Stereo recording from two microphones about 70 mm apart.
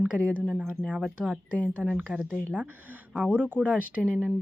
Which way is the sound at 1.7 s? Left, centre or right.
Right.